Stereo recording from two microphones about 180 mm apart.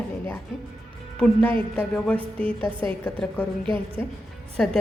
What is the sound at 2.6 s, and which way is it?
Speech, 30° right (ahead or behind).